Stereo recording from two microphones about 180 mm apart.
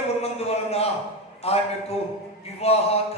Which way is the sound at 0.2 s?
35° left (ahead or behind).